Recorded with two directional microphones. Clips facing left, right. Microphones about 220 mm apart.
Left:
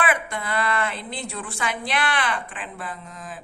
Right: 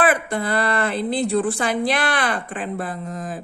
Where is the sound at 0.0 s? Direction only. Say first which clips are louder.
Right 6 dB; 35° right (ahead or behind).